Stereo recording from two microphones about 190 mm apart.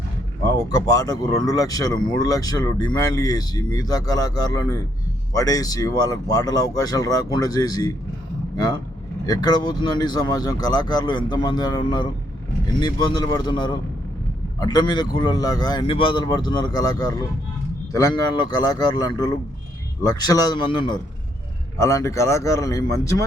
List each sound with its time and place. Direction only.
0.7 s speech: 20° left (ahead or behind)
9.2 s speech: 20° left (ahead or behind)